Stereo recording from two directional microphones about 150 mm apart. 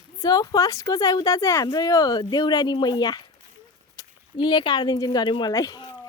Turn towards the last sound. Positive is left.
turn(degrees=25)  # may be behind; listen again after turning